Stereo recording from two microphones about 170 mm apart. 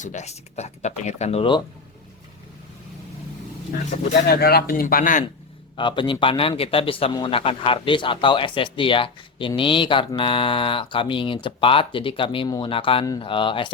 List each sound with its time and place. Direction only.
0.0 s a man's voice: 45° left (ahead or behind)
4.3 s speech: 65° left (ahead or behind)
5.7 s a man's voice: 30° left (ahead or behind)